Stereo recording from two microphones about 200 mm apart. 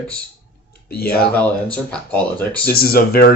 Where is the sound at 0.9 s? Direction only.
50° left (ahead or behind).